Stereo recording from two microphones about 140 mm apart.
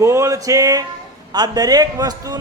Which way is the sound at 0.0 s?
20° right (ahead or behind).